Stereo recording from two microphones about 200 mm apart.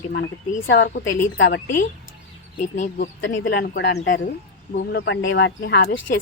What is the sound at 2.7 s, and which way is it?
Speech, 40° left (ahead or behind).